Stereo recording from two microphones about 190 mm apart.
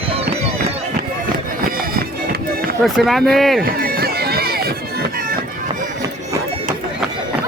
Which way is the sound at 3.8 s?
55° right (ahead or behind).